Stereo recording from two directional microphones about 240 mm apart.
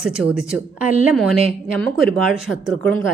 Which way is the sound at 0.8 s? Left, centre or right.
Centre.